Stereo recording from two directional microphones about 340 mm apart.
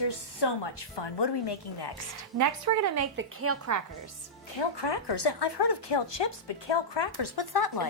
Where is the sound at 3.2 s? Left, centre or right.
Right.